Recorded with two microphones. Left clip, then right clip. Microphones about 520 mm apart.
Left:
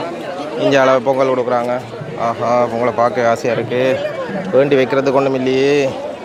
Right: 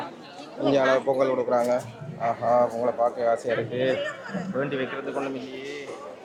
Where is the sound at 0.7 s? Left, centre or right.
Left.